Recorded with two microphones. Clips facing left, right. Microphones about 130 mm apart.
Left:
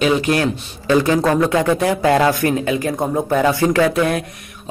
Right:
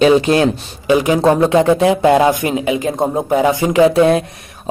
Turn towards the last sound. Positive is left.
turn(degrees=-25)  # may be behind; listen again after turning